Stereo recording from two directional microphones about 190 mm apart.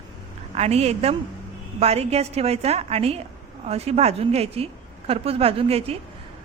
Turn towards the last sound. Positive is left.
turn(degrees=-30)  # may be behind; listen again after turning